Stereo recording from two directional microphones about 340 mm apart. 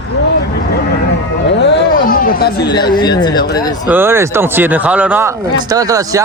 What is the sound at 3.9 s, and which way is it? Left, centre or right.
A man's voice, centre.